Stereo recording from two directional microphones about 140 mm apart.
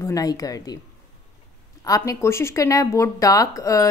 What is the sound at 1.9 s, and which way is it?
A woman's voice, 20° left (ahead or behind).